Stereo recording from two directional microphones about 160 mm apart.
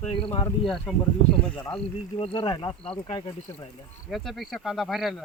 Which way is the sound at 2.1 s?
30° left (ahead or behind).